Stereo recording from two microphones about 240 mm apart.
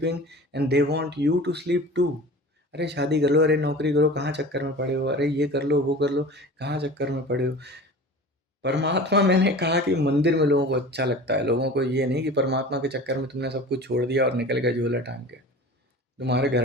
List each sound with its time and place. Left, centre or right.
0.0 s speech: right